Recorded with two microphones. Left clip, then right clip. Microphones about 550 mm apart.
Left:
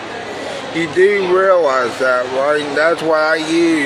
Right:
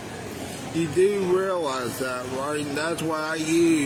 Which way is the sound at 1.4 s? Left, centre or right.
Right.